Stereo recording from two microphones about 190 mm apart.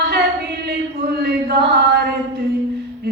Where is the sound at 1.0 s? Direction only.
60° right (ahead or behind).